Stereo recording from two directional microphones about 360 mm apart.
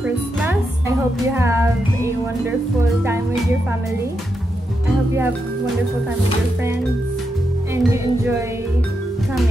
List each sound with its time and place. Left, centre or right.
0.0 s speech: centre
7.7 s music: centre